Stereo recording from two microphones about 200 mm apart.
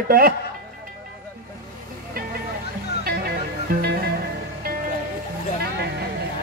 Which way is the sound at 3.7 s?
50° right (ahead or behind).